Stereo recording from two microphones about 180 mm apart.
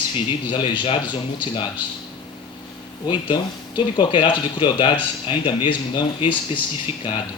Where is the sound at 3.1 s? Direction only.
25° left (ahead or behind).